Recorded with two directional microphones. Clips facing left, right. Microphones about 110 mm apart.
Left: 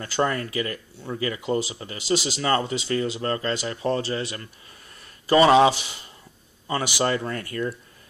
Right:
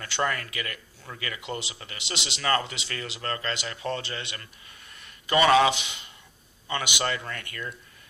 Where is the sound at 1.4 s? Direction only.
35° left (ahead or behind).